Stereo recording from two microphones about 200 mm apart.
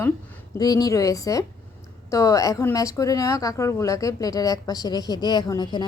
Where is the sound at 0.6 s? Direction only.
20° left (ahead or behind).